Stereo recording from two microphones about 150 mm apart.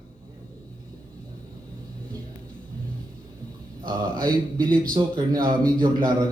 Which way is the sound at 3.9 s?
30° right (ahead or behind).